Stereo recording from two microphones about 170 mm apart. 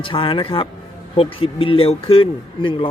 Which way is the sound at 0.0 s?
30° left (ahead or behind).